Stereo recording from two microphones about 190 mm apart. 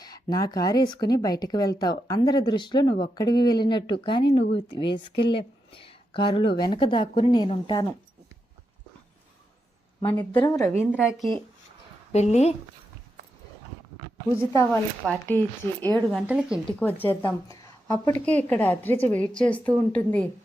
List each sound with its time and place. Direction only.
0.0 s a woman's voice: 20° left (ahead or behind)
10.0 s a woman's voice: 25° left (ahead or behind)
10.6 s a woman's voice: 5° left (ahead or behind)
12.1 s a woman's voice: 35° left (ahead or behind)
14.5 s a woman's voice: 15° left (ahead or behind)
16.2 s speech: 5° right (ahead or behind)
16.8 s a woman's voice: 10° left (ahead or behind)